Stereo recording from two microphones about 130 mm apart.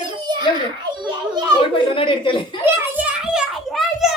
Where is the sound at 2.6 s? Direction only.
10° right (ahead or behind).